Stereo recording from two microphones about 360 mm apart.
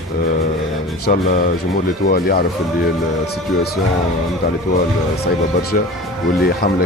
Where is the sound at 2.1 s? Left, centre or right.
Left.